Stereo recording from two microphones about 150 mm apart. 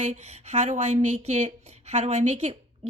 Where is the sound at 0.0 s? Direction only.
45° right (ahead or behind).